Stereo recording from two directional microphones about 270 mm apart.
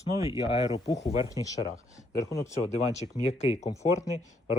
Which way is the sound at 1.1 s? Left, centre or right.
Centre.